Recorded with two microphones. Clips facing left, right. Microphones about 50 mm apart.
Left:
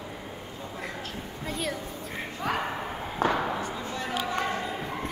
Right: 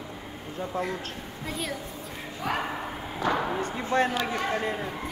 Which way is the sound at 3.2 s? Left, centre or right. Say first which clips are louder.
Left 1 dB; left.